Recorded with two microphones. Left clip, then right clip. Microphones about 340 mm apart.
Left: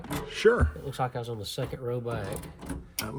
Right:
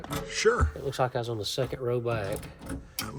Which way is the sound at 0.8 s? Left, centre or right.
Right.